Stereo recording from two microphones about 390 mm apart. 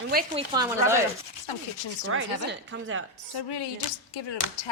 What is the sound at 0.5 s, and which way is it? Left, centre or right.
Speech, centre.